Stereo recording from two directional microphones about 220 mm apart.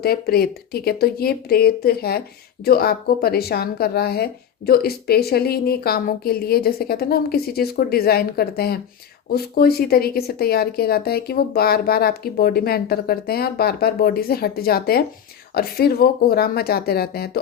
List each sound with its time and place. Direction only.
0.0 s a woman's voice: 45° left (ahead or behind)